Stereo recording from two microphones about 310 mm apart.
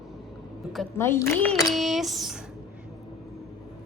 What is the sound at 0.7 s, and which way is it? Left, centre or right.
A woman's voice, centre.